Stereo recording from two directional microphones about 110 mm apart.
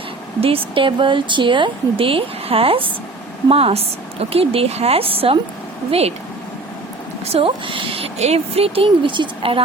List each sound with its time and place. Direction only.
0.3 s speech: 60° right (ahead or behind)
5.9 s speech: 70° right (ahead or behind)
7.3 s speech: 55° right (ahead or behind)